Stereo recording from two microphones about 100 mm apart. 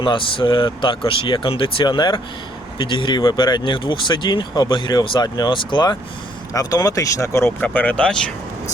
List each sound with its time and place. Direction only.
0.0 s speech: 60° left (ahead or behind); by 7.5 s 30° left (ahead or behind)
7.6 s speech: 15° left (ahead or behind)